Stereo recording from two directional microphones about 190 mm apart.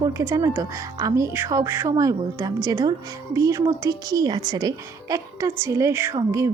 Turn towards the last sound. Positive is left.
turn(degrees=-15)  # may be behind; listen again after turning